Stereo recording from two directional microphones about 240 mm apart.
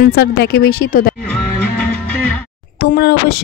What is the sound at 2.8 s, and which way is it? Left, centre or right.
Speech, left.